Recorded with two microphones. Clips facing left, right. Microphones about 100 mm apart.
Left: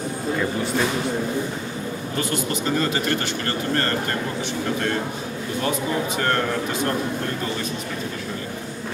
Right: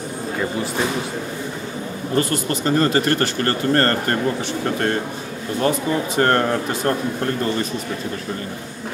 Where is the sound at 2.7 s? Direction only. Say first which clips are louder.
Right 7 dB; 50° right (ahead or behind).